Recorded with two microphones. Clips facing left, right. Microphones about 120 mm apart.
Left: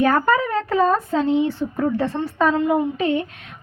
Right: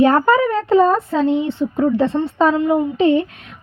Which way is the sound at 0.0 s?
25° right (ahead or behind).